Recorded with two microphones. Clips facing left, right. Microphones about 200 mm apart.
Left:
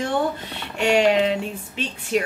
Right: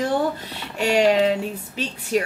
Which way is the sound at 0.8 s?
40° right (ahead or behind).